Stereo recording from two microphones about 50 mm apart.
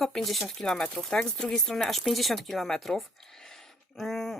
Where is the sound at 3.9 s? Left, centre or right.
Centre.